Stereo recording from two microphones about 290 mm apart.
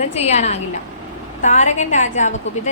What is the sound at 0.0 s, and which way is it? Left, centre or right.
A woman's voice, left.